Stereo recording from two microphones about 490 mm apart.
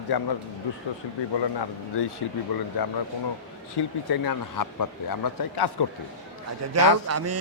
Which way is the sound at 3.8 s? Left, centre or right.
Left.